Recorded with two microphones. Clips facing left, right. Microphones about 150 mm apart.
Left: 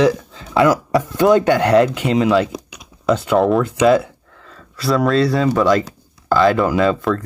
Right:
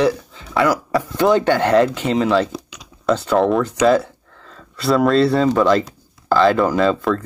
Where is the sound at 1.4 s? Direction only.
10° left (ahead or behind).